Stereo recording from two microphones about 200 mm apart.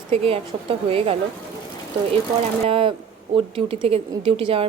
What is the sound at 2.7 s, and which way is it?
A woman's voice, 25° right (ahead or behind).